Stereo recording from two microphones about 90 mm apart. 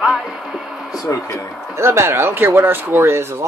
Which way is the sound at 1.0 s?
35° left (ahead or behind).